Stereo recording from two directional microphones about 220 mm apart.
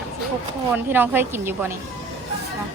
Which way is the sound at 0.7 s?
10° right (ahead or behind).